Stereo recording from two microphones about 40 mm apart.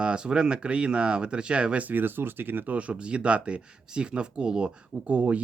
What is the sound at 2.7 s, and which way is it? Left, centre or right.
Speech, right.